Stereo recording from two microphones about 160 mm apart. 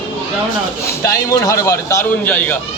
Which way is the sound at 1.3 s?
20° left (ahead or behind).